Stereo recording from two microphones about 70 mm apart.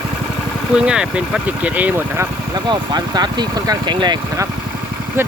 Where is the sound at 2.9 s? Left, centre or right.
Right.